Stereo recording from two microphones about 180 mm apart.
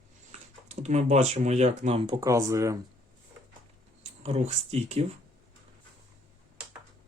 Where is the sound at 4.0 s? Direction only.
35° right (ahead or behind).